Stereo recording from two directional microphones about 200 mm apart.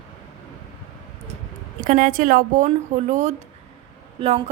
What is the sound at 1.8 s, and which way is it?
Speech, 40° right (ahead or behind).